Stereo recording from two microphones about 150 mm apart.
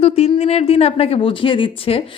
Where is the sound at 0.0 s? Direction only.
40° left (ahead or behind).